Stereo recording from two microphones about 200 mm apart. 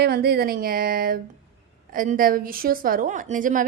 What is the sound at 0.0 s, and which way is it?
A woman's voice, 50° right (ahead or behind).